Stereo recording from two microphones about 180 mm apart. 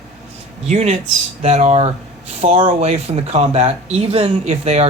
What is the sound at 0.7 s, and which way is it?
Speech, 40° right (ahead or behind).